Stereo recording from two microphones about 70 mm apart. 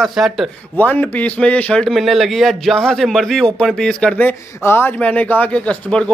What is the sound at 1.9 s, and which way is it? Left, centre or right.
A man's voice, centre.